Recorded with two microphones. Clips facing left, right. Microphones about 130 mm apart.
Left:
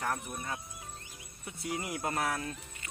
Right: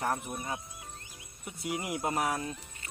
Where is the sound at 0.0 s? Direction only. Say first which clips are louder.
Right 3 dB; 20° right (ahead or behind).